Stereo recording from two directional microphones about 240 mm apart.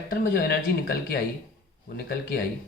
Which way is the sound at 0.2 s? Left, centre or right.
Left.